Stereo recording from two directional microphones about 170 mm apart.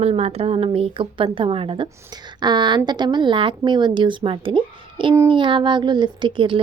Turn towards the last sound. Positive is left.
turn(degrees=-30)  # may be behind; listen again after turning